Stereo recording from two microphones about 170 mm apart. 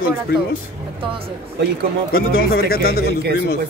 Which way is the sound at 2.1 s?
60° left (ahead or behind).